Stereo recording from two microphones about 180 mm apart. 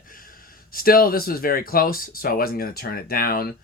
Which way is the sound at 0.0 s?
50° left (ahead or behind).